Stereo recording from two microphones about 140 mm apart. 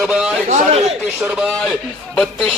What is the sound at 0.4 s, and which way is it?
Speech, 55° right (ahead or behind).